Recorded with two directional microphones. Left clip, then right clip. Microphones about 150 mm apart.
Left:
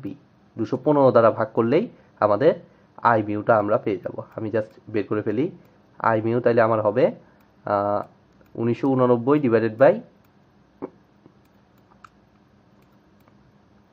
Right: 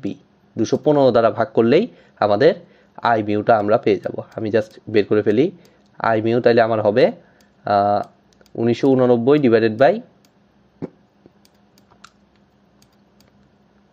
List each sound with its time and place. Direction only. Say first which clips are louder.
0.6 s speech: right 4 dB; 20° right (ahead or behind)